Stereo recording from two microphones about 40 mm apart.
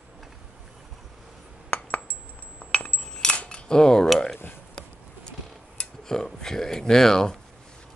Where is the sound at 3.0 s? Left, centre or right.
Centre.